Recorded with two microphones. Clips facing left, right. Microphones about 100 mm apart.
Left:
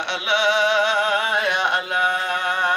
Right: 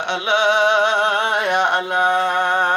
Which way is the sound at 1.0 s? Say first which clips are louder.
Right 2 dB; 60° right (ahead or behind).